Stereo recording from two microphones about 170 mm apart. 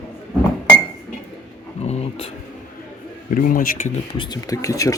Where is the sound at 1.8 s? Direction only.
40° left (ahead or behind).